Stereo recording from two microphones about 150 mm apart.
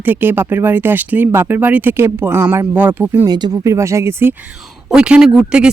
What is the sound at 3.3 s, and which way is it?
Speech, 25° right (ahead or behind).